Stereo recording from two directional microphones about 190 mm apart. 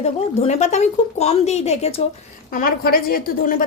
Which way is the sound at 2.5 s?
45° left (ahead or behind).